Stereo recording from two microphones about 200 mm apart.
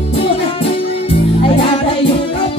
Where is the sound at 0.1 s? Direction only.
25° left (ahead or behind).